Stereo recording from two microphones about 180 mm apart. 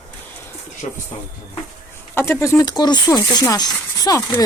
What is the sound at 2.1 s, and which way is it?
Speech, 15° left (ahead or behind).